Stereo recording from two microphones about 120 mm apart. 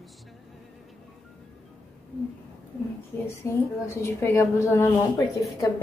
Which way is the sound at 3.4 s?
20° left (ahead or behind).